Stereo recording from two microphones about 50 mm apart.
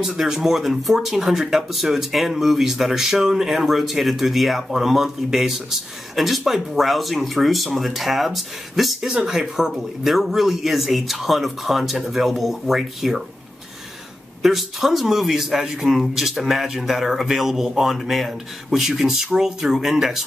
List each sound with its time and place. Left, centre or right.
0.0 s speech: centre
14.4 s speech: centre